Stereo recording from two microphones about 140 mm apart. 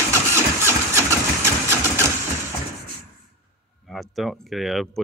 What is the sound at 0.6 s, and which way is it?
Vehicle, 20° right (ahead or behind).